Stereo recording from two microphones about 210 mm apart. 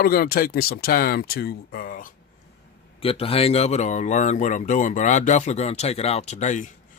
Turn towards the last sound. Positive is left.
turn(degrees=35)  # may be behind; listen again after turning